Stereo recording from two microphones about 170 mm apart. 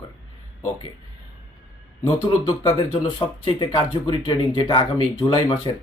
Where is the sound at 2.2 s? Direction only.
25° left (ahead or behind).